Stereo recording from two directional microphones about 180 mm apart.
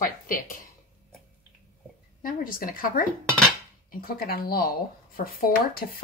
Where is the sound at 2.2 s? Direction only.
50° left (ahead or behind).